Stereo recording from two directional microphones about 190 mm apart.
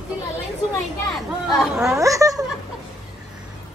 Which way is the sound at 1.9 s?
15° right (ahead or behind).